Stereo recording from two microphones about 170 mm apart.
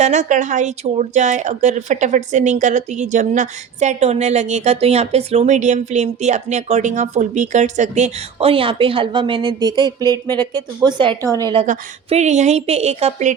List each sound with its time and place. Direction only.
0.0 s a woman's voice: 45° right (ahead or behind); by 11.6 s 25° right (ahead or behind)
11.6 s a woman's voice: 40° right (ahead or behind)